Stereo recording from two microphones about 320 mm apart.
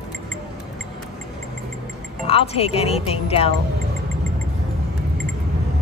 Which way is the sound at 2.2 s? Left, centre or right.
Centre.